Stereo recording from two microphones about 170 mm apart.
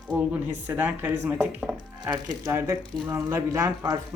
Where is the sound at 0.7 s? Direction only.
10° right (ahead or behind).